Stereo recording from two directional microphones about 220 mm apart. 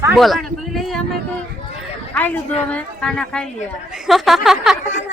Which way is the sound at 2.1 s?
5° left (ahead or behind).